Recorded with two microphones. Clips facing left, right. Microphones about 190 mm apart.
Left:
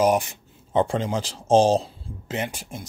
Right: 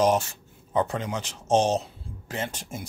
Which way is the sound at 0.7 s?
30° left (ahead or behind).